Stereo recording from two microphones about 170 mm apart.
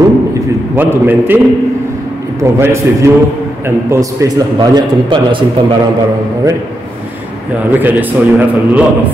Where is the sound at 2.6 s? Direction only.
15° right (ahead or behind).